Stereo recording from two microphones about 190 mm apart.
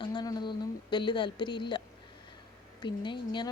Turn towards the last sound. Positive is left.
turn(degrees=25)  # may be behind; listen again after turning